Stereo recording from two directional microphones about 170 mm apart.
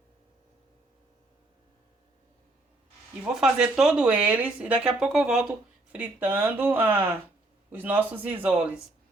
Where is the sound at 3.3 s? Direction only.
5° right (ahead or behind).